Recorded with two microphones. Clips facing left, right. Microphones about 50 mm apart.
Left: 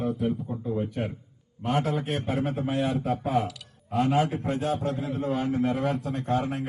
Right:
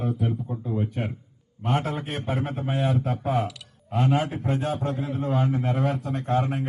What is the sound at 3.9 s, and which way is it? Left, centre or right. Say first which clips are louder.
A man's voice: even; right.